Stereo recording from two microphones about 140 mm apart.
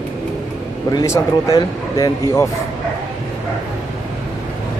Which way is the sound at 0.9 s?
25° left (ahead or behind).